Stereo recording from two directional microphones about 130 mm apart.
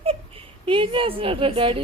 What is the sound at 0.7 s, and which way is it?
A woman's voice, 40° right (ahead or behind).